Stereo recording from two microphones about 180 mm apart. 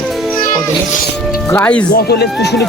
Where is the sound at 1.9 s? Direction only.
65° left (ahead or behind).